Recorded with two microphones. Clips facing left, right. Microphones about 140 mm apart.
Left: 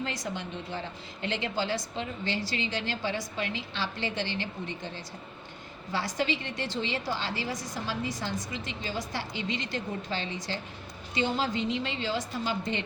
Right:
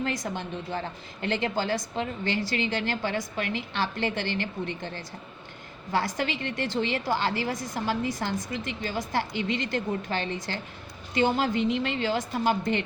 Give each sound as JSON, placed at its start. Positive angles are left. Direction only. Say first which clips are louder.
{"t": 0.0, "sound": "a woman's voice", "louder": "right 4 dB", "side_deg": -50}